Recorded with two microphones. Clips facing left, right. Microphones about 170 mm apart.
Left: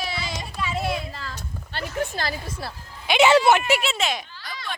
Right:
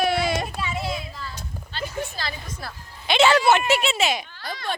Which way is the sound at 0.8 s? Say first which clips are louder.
Left 2 dB; 75° left (ahead or behind).